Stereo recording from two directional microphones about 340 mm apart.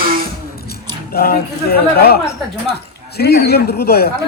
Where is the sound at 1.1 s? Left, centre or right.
Left.